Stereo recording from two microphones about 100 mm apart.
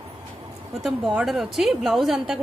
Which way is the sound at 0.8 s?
5° right (ahead or behind).